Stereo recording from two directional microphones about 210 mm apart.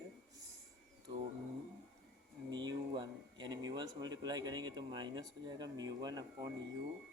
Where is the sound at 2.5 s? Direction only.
20° right (ahead or behind).